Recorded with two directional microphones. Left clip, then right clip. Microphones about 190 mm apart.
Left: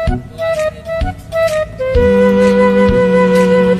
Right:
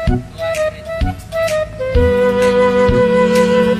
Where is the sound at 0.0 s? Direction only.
Centre (ahead or behind).